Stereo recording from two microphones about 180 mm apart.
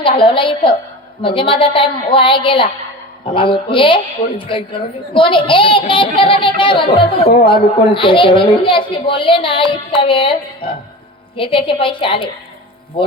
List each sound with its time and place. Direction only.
0.2 s a woman's voice: 30° left (ahead or behind)